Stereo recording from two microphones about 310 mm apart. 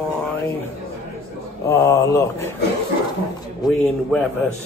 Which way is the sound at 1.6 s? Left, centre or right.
Centre.